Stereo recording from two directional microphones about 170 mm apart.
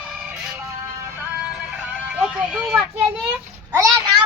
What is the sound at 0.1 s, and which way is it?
Music, 5° right (ahead or behind).